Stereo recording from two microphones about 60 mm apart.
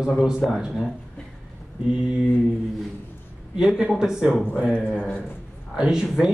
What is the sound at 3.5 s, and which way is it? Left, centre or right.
Speech, centre.